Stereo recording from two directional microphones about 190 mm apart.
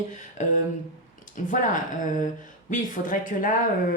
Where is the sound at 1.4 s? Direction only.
45° left (ahead or behind).